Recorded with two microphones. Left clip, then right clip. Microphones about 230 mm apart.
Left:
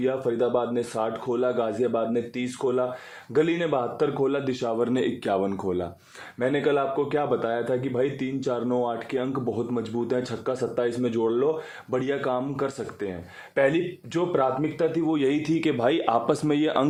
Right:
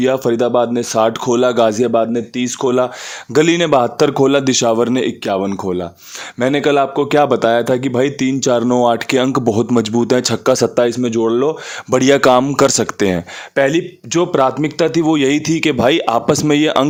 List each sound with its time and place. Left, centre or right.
0.0 s a man's voice: right
6.4 s a man's voice: right